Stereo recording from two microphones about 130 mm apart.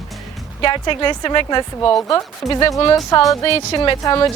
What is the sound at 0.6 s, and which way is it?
A woman's voice, 40° left (ahead or behind).